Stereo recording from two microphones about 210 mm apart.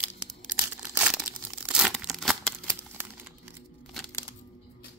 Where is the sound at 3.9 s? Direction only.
5° left (ahead or behind).